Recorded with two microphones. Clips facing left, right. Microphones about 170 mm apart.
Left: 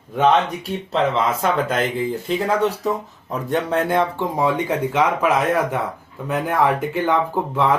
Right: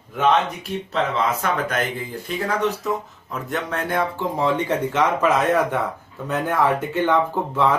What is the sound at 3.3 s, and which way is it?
Speech, 30° left (ahead or behind).